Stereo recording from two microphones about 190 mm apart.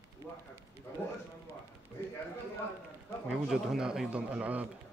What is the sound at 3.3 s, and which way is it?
A man's voice, 5° right (ahead or behind).